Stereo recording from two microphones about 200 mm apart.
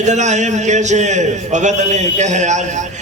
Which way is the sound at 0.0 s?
35° right (ahead or behind).